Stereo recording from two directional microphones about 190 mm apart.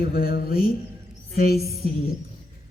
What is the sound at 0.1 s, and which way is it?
Speech, 50° left (ahead or behind).